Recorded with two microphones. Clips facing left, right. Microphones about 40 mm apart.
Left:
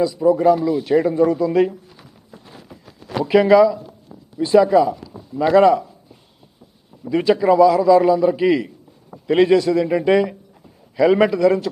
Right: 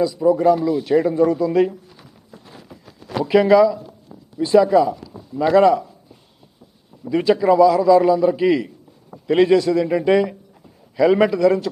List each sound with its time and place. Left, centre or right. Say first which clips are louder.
0.0 s a man's voice: left 1 dB; centre
7.0 s a man's voice: even; centre